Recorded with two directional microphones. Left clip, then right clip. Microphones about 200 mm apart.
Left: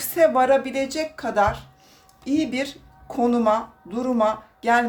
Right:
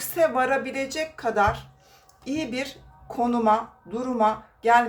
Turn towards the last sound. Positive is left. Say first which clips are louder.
# right 1 dB
turn(degrees=30)  # may be behind; listen again after turning